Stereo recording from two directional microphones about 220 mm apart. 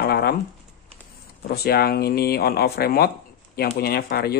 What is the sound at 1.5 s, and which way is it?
Speech, 45° left (ahead or behind).